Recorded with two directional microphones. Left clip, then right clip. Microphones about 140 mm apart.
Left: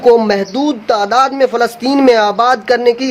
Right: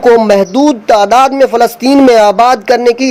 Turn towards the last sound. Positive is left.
turn(degrees=-40)  # may be behind; listen again after turning